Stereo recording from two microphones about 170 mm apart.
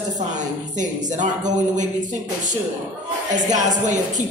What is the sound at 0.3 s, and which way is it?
A man's voice, 45° right (ahead or behind).